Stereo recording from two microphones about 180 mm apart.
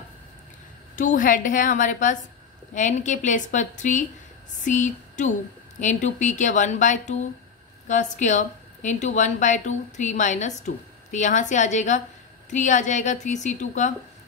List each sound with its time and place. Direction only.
0.9 s a woman's voice: 45° left (ahead or behind)